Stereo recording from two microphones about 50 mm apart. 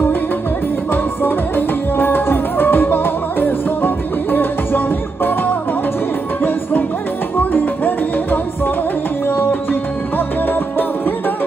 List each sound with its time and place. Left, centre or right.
0.9 s music: left
7.3 s music: left